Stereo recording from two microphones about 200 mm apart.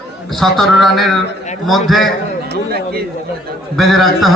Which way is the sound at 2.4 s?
50° right (ahead or behind).